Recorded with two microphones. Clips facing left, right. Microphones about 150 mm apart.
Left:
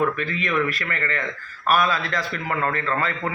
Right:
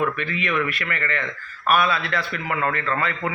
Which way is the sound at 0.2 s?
40° left (ahead or behind).